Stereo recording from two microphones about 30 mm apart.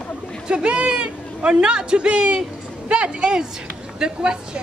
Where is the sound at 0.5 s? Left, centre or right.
Right.